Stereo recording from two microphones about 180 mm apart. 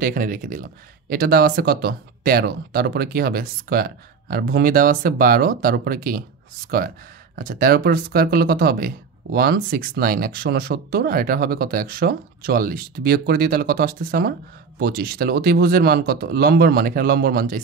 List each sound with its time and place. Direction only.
0.0 s speech: 50° right (ahead or behind)
7.3 s speech: 50° right (ahead or behind)